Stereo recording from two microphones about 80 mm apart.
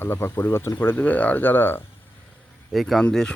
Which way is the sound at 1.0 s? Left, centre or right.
Centre.